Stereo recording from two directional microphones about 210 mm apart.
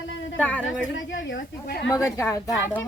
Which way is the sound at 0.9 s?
60° left (ahead or behind).